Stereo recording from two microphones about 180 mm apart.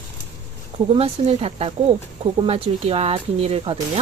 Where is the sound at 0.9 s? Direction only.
30° right (ahead or behind).